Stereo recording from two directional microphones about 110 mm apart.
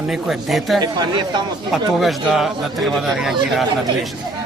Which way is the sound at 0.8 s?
40° right (ahead or behind).